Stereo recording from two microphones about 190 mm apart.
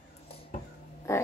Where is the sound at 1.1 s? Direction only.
15° left (ahead or behind).